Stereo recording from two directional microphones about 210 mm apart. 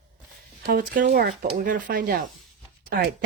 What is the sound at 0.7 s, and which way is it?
Speech, 40° right (ahead or behind).